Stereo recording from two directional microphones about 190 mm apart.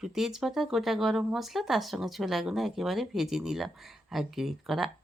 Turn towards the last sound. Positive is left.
turn(degrees=0)  # may be behind; listen again after turning